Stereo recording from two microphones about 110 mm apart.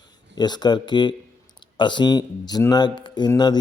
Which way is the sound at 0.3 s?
40° left (ahead or behind).